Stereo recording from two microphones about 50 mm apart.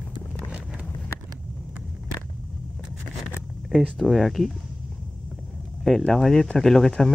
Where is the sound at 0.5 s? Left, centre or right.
Right.